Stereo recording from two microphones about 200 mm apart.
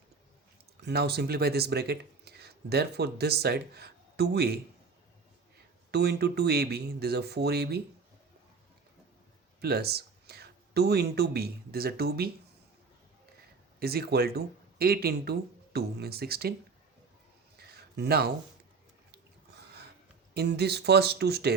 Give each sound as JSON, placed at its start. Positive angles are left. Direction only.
{"t": 0.8, "sound": "speech", "side_deg": -55}
{"t": 5.9, "sound": "speech", "side_deg": -55}
{"t": 9.6, "sound": "speech", "side_deg": -50}
{"t": 13.7, "sound": "speech", "side_deg": -50}
{"t": 17.6, "sound": "a sound", "side_deg": -50}
{"t": 19.5, "sound": "a sound", "side_deg": -55}
{"t": 20.3, "sound": "speech", "side_deg": -55}